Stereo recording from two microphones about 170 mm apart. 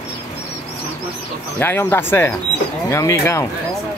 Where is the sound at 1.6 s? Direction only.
15° left (ahead or behind).